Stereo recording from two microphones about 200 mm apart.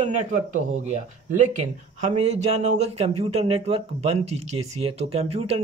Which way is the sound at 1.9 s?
35° right (ahead or behind).